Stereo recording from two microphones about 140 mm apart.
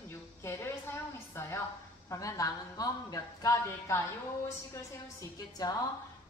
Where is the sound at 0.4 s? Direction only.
20° left (ahead or behind).